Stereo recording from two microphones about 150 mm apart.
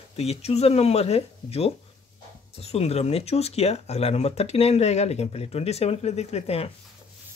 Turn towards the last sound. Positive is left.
turn(degrees=40)  # may be behind; listen again after turning